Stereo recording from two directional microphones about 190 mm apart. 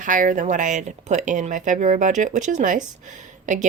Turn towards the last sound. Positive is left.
turn(degrees=-40)  # may be behind; listen again after turning